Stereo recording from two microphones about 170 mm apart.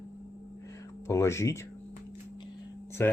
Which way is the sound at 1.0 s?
15° left (ahead or behind).